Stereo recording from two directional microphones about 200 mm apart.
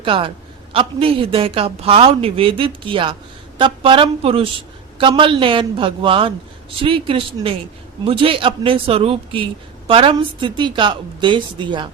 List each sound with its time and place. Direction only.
0.0 s a man's voice: 25° right (ahead or behind)